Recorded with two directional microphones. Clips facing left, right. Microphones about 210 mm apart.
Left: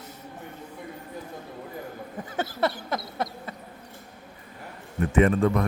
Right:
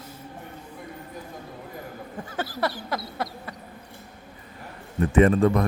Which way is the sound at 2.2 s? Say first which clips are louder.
Left 2 dB; 25° left (ahead or behind).